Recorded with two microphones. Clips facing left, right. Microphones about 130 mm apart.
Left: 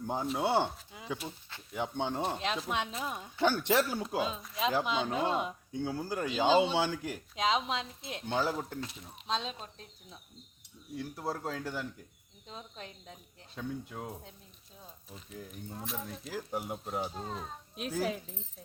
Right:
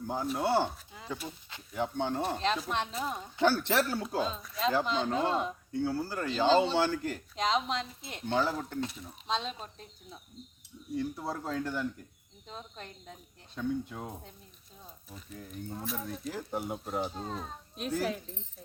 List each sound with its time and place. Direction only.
0.1 s speech: 20° left (ahead or behind); by 16.3 s 5° right (ahead or behind)
16.3 s speech: 5° left (ahead or behind)